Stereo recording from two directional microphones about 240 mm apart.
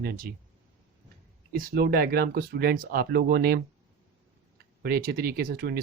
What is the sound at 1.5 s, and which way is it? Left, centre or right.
Speech, right.